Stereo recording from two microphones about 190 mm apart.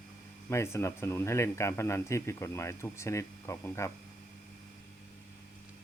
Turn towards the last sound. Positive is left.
turn(degrees=15)  # may be behind; listen again after turning